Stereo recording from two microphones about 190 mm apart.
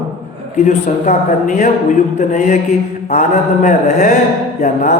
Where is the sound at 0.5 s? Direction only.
40° left (ahead or behind).